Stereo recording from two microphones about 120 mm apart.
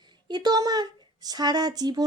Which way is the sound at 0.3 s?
35° right (ahead or behind).